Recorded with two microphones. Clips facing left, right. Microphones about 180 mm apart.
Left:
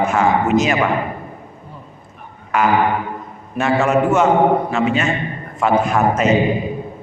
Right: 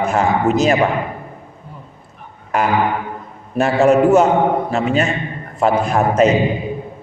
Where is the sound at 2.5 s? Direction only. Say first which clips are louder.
Left 1 dB; 40° right (ahead or behind).